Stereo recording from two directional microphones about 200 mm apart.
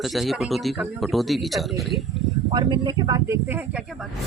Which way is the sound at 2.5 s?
20° right (ahead or behind).